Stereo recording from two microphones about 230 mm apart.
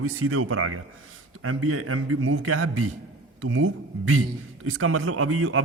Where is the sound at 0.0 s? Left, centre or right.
Right.